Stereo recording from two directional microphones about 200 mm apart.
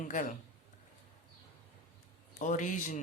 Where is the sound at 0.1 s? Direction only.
40° left (ahead or behind).